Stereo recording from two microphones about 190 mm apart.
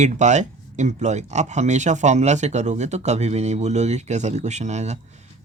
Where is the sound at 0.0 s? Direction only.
40° right (ahead or behind).